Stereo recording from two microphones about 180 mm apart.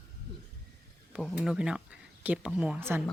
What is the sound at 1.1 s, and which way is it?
Speech, centre (ahead or behind).